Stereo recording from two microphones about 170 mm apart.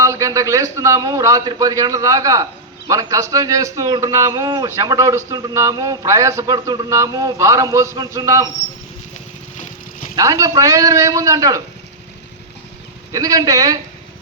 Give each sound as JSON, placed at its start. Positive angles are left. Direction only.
{"t": 0.0, "sound": "a man's voice", "side_deg": -20}
{"t": 10.2, "sound": "a man's voice", "side_deg": -20}
{"t": 13.1, "sound": "a man's voice", "side_deg": -20}